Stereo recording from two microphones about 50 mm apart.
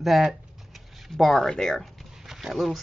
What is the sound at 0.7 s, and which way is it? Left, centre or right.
Speech, centre.